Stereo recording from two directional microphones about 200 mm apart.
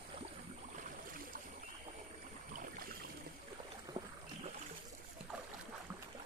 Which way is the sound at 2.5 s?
45° right (ahead or behind).